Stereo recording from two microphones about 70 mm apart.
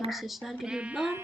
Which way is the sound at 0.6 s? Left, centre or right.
Centre.